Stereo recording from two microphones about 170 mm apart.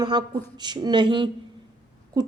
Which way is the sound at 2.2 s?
25° right (ahead or behind).